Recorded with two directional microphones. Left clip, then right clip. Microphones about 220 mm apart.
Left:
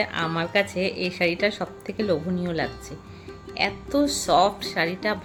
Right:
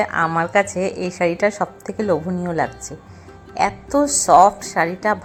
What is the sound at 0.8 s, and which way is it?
Speech, 40° right (ahead or behind).